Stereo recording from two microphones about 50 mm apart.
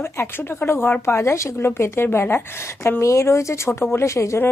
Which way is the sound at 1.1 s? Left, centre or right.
Left.